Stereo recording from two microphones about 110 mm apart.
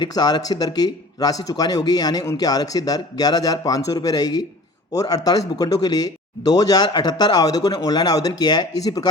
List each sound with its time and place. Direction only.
0.0 s a man's voice: 40° left (ahead or behind)